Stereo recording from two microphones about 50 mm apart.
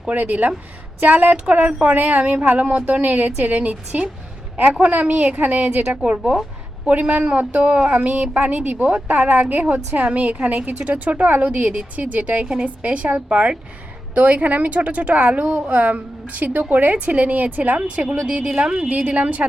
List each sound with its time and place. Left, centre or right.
0.1 s a woman's voice: right
15.7 s a woman's voice: right